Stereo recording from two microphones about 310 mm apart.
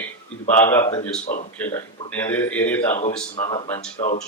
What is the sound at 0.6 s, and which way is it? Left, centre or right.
Speech, centre.